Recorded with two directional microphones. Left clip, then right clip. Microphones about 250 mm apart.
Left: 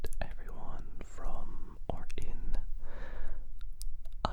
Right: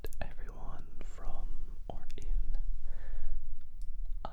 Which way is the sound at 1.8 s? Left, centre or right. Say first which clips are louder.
Left 6 dB; left.